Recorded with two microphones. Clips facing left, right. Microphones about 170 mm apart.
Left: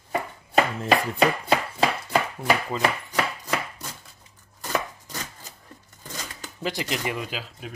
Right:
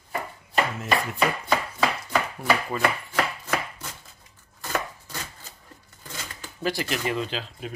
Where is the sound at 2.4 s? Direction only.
20° left (ahead or behind).